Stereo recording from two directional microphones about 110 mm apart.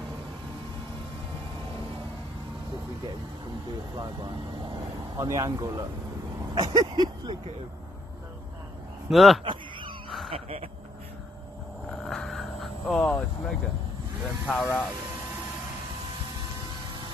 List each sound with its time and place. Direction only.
4.0 s speech: 40° right (ahead or behind)
6.5 s a sound: 35° right (ahead or behind)
9.1 s speech: centre (ahead or behind)
9.4 s a sound: 50° right (ahead or behind)
10.0 s crow: centre (ahead or behind)
10.3 s speech: 60° right (ahead or behind)
11.9 s a sound: 5° left (ahead or behind)
14.2 s speech: centre (ahead or behind)
14.6 s speech: 15° left (ahead or behind)